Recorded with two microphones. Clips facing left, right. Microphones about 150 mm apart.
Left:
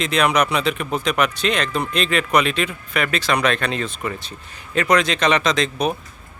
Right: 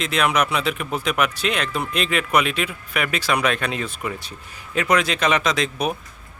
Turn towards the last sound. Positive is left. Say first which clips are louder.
# left 2 dB
turn(degrees=-5)  # may be behind; listen again after turning